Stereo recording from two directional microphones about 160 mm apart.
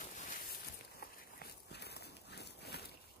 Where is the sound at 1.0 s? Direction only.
75° left (ahead or behind).